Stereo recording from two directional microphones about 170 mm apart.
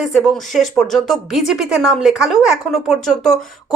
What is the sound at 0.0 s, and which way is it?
Speech, centre (ahead or behind).